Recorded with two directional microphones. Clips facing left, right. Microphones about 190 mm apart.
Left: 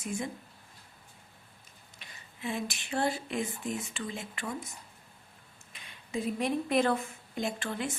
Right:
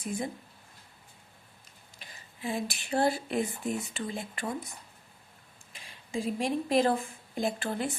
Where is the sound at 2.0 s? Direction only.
35° right (ahead or behind).